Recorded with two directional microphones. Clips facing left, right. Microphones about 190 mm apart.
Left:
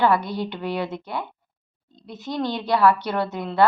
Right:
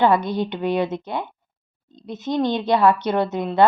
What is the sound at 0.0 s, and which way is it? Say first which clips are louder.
A woman's voice: right 3 dB; 20° right (ahead or behind).